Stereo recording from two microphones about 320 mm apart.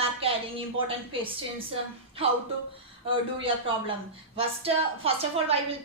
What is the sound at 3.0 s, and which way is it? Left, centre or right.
A woman's voice, centre.